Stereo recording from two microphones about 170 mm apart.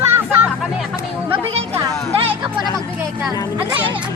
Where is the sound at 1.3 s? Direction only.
35° right (ahead or behind).